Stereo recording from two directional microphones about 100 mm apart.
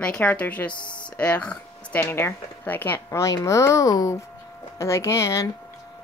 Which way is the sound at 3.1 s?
30° left (ahead or behind).